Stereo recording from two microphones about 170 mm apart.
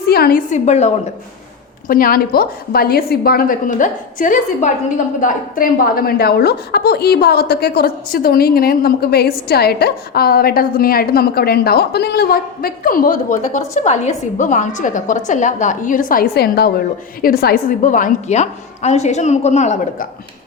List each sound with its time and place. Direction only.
0.0 s a woman's voice: 65° left (ahead or behind); by 0.9 s 40° left (ahead or behind)
1.9 s a woman's voice: 60° left (ahead or behind)